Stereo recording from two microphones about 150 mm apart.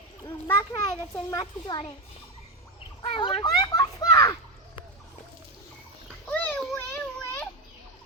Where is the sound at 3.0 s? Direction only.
35° left (ahead or behind).